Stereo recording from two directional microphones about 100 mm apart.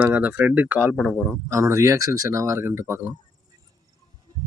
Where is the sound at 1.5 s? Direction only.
30° right (ahead or behind).